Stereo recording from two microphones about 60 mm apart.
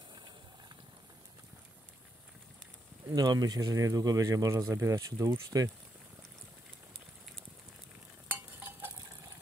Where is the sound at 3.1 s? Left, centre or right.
Right.